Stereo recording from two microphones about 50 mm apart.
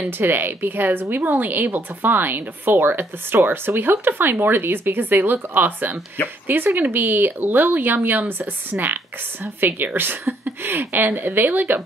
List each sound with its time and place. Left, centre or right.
0.2 s speech: right
9.6 s speech: right